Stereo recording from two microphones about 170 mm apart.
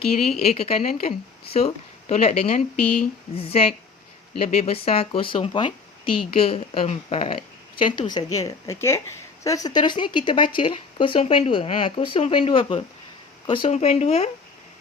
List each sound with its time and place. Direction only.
0.2 s speech: 40° left (ahead or behind)
13.7 s speech: 40° left (ahead or behind)